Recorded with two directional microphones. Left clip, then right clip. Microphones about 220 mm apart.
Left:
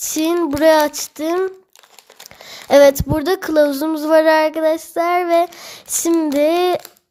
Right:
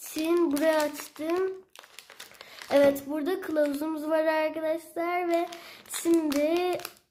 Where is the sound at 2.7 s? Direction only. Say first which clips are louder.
Left 12 dB; 45° left (ahead or behind).